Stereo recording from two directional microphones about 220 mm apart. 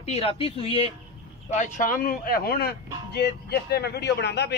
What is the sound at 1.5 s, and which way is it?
A man's voice, 35° left (ahead or behind).